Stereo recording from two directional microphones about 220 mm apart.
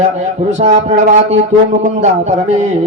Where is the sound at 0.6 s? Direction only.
30° right (ahead or behind).